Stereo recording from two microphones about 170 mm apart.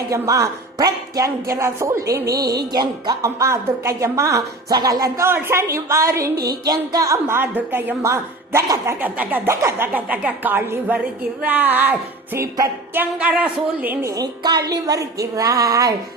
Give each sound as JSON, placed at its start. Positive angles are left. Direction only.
{"t": 0.1, "sound": "a woman's voice", "side_deg": -20}